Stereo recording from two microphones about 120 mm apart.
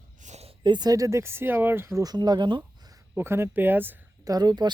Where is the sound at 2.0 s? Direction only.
35° right (ahead or behind).